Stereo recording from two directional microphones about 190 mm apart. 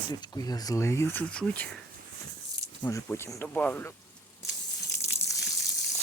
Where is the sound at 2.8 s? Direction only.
15° left (ahead or behind).